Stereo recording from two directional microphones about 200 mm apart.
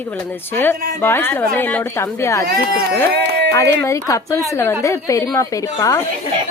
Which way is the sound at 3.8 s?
15° left (ahead or behind).